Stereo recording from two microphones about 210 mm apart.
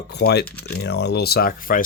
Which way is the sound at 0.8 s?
55° left (ahead or behind).